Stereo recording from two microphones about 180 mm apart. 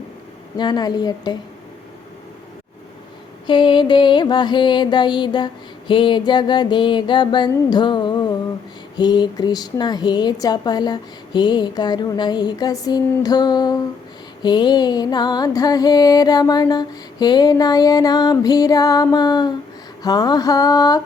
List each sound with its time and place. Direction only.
0.5 s music: 25° left (ahead or behind)
3.4 s music: 25° left (ahead or behind)